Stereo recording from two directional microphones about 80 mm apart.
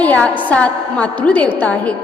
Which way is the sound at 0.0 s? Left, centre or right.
Centre.